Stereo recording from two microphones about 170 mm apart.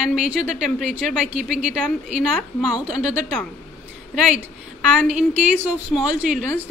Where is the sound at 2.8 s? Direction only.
10° right (ahead or behind).